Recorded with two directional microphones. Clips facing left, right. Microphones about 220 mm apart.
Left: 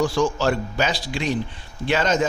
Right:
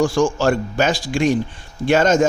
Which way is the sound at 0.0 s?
50° right (ahead or behind).